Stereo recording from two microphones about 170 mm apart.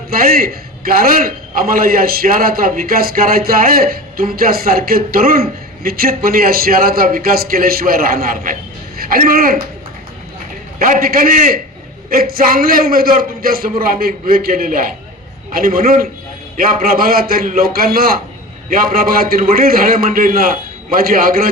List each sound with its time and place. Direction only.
0.1 s a man's voice: 60° right (ahead or behind)
10.8 s a man's voice: 55° right (ahead or behind)